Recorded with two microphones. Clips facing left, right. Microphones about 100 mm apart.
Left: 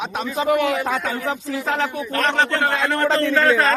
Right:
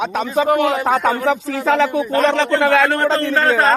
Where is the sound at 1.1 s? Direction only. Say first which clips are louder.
Right 7 dB; 80° right.